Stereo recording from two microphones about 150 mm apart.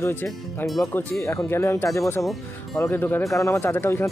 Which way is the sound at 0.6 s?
Centre (ahead or behind).